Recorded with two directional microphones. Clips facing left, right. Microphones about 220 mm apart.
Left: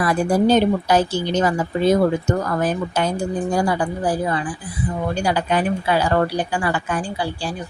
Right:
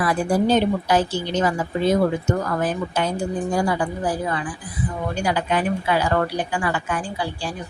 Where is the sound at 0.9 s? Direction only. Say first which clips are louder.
Left 2 dB; 40° left (ahead or behind).